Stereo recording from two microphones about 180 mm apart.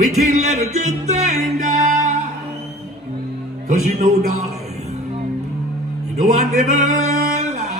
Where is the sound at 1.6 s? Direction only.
40° right (ahead or behind).